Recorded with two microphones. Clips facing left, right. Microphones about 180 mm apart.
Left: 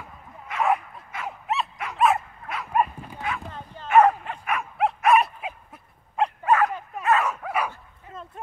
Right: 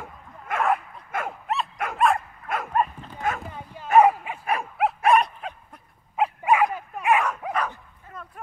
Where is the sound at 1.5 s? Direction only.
Centre (ahead or behind).